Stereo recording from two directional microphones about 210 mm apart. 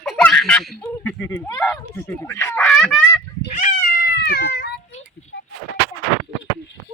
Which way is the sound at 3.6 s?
45° left (ahead or behind).